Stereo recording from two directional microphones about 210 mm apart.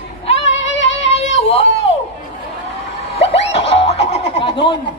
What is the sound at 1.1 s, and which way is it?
Music, 30° left (ahead or behind).